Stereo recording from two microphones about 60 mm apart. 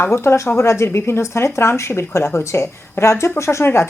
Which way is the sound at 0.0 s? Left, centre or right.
Left.